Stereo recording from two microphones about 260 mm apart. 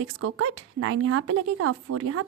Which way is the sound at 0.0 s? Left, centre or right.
Right.